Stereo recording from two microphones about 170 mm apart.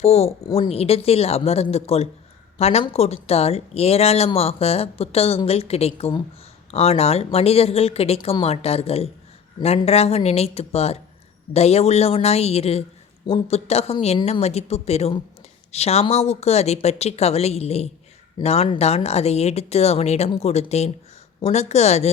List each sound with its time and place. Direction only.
0.0 s speech: 35° left (ahead or behind)